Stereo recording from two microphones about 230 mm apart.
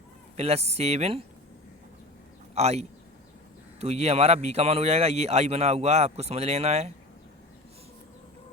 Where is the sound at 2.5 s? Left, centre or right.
Right.